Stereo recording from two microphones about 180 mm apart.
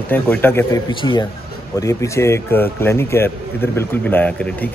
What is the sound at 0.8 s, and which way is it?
A man's voice, 25° left (ahead or behind).